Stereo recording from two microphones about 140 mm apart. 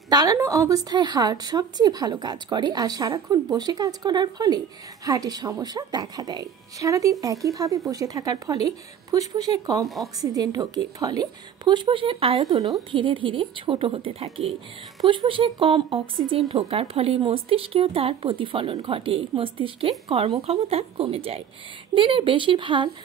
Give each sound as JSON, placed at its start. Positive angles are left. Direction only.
{"t": 0.1, "sound": "a woman's voice", "side_deg": -25}
{"t": 12.4, "sound": "a woman's voice", "side_deg": -25}